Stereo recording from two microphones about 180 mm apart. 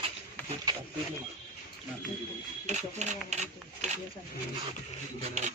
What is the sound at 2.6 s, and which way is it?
Speech, 40° right (ahead or behind).